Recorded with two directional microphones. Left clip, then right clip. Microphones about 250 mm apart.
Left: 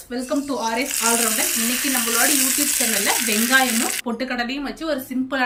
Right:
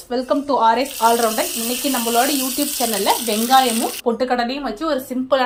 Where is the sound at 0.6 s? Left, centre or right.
Centre.